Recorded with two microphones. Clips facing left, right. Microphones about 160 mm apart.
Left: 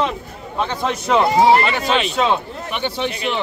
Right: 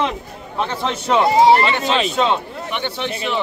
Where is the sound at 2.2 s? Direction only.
10° left (ahead or behind).